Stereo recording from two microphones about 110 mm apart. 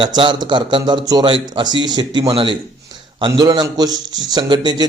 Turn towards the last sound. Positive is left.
turn(degrees=-40)  # may be behind; listen again after turning